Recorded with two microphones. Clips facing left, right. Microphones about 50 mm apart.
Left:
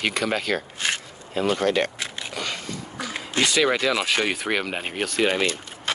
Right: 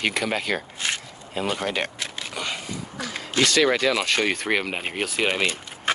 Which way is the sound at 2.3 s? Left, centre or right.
Centre.